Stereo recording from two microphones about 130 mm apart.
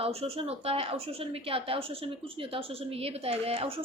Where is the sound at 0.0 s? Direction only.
50° right (ahead or behind).